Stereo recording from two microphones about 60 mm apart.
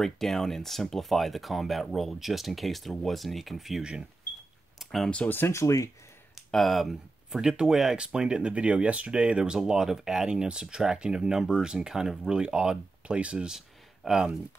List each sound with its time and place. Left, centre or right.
0.0 s speech: centre
4.7 s a sound: centre
5.5 s speech: left
6.5 s speech: centre